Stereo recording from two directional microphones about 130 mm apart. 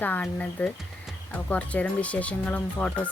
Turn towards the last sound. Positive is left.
turn(degrees=10)  # may be behind; listen again after turning